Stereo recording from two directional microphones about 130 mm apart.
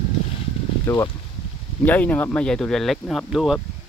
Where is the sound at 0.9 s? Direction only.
20° left (ahead or behind); by 3.6 s centre (ahead or behind).